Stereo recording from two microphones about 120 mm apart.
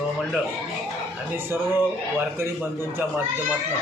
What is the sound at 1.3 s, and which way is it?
Speech, 20° right (ahead or behind).